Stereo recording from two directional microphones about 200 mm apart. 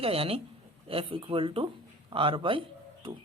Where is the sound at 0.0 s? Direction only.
30° right (ahead or behind).